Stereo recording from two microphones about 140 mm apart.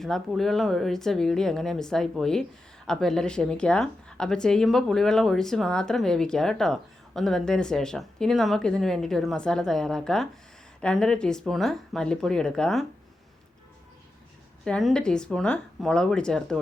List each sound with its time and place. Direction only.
0.0 s speech: centre (ahead or behind)
14.6 s speech: 5° left (ahead or behind)